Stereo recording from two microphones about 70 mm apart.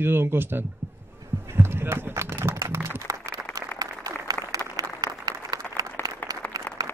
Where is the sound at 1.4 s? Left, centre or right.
Right.